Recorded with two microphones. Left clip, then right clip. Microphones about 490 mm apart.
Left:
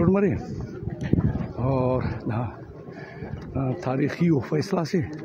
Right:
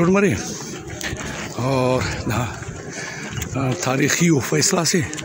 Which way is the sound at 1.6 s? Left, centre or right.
Left.